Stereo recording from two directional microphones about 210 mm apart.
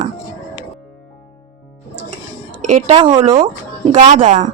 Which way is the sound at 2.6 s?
35° right (ahead or behind).